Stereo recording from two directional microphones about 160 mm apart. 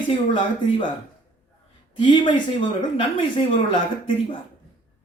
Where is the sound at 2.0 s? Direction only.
30° left (ahead or behind).